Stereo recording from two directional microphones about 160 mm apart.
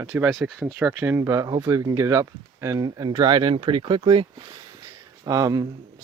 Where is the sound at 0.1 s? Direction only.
Centre (ahead or behind); by 4.3 s 35° right (ahead or behind).